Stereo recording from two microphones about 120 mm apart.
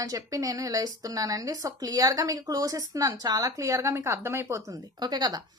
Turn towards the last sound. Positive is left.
turn(degrees=-35)  # may be behind; listen again after turning